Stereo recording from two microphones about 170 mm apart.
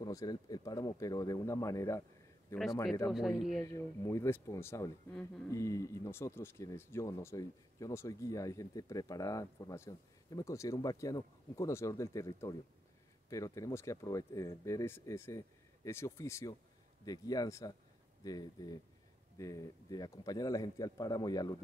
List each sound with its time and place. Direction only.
0.0 s speech: 20° left (ahead or behind)
3.1 s speech: centre (ahead or behind)
3.6 s speech: 15° left (ahead or behind)